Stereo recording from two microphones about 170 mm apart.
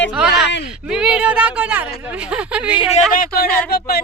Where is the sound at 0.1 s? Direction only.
5° right (ahead or behind).